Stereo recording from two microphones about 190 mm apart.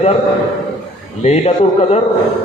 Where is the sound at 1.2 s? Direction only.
35° left (ahead or behind).